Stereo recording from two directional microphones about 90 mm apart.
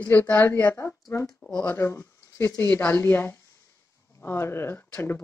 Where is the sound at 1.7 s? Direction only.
30° left (ahead or behind).